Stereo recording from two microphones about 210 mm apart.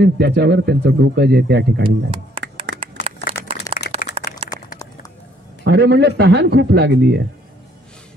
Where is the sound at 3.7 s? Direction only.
50° left (ahead or behind).